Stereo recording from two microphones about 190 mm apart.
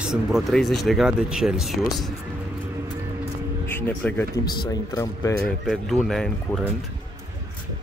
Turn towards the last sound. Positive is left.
turn(degrees=0)  # may be behind; listen again after turning